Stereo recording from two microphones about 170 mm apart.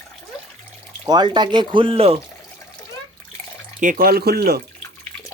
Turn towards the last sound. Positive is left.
turn(degrees=-65)  # may be behind; listen again after turning